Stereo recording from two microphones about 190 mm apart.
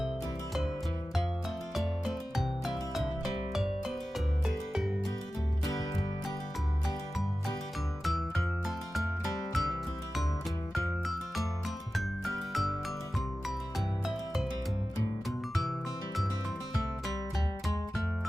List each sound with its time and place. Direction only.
1.7 s music: centre (ahead or behind)
8.6 s music: centre (ahead or behind)
11.0 s music: centre (ahead or behind)